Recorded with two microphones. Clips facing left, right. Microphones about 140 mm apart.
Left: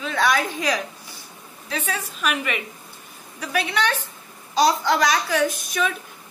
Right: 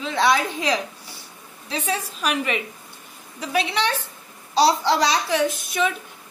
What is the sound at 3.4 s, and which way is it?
A woman's voice, 20° right (ahead or behind).